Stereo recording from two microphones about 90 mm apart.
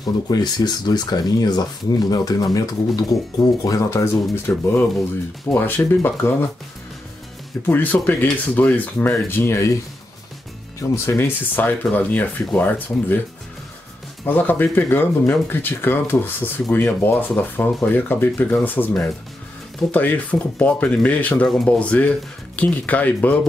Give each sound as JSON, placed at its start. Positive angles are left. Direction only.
{"t": 0.0, "sound": "speech", "side_deg": 45}
{"t": 7.6, "sound": "speech", "side_deg": 20}
{"t": 10.8, "sound": "speech", "side_deg": 30}
{"t": 14.2, "sound": "speech", "side_deg": 20}
{"t": 19.9, "sound": "speech", "side_deg": 15}